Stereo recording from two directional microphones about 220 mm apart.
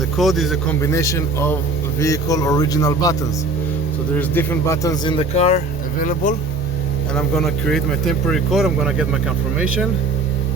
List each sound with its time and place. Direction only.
0.2 s speech: centre (ahead or behind)
0.8 s speech: 15° left (ahead or behind)
4.2 s speech: 10° left (ahead or behind); by 6.3 s 35° left (ahead or behind)
7.2 s speech: centre (ahead or behind)